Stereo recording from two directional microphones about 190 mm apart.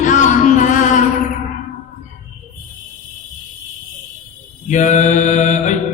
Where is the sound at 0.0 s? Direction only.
40° left (ahead or behind).